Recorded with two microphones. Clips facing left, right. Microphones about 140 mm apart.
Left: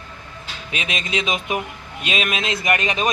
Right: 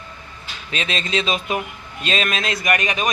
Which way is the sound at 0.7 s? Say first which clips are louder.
Right 2 dB; 10° left (ahead or behind).